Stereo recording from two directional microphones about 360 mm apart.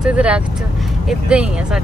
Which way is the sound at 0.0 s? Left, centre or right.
Centre.